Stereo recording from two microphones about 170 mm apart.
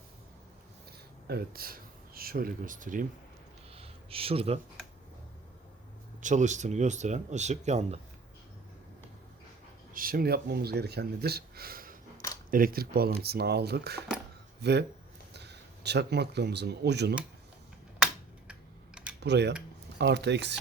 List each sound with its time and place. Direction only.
0.9 s speech: 70° right (ahead or behind); by 3.1 s 50° right (ahead or behind)
3.8 s a sound: 35° right (ahead or behind)
6.2 s speech: 45° right (ahead or behind)
9.9 s speech: 55° right (ahead or behind); by 17.2 s 80° right
19.2 s speech: 80° right